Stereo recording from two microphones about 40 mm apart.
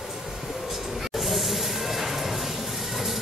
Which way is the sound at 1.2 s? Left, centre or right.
Centre.